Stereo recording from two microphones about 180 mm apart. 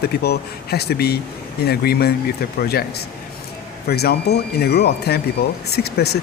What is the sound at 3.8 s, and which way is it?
Speech, 65° left (ahead or behind).